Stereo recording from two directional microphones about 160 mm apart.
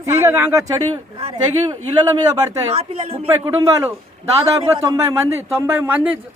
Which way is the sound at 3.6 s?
20° right (ahead or behind).